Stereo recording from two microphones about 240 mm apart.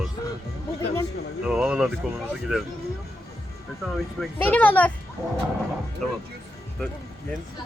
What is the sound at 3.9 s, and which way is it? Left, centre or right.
Speech, centre.